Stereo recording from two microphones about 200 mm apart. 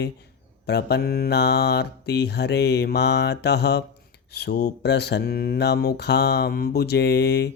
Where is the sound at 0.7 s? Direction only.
55° left (ahead or behind).